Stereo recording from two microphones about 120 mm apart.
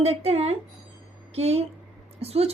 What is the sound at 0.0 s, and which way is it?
A woman's voice, 60° right (ahead or behind).